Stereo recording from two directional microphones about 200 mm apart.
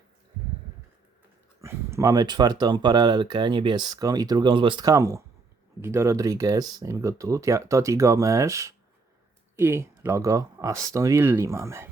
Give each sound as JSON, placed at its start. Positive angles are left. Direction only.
{"t": 1.6, "sound": "speech", "side_deg": -15}